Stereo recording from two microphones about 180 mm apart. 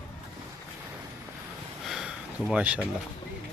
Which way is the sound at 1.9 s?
5° right (ahead or behind).